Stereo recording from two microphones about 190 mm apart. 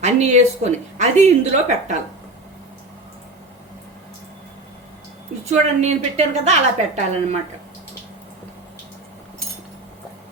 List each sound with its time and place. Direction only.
0.0 s a woman's voice: 35° right (ahead or behind)
5.5 s a woman's voice: 35° right (ahead or behind)